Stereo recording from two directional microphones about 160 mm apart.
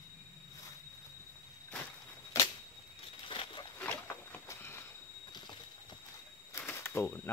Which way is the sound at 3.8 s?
10° left (ahead or behind).